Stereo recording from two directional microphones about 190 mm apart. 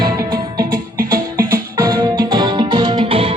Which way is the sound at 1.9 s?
25° right (ahead or behind).